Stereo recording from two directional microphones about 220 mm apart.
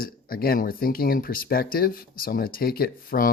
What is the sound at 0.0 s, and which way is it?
Speech, 40° left (ahead or behind).